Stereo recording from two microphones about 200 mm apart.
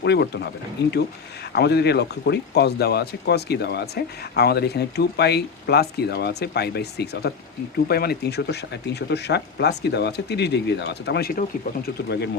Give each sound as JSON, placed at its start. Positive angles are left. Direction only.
{"t": 0.0, "sound": "speech", "side_deg": 60}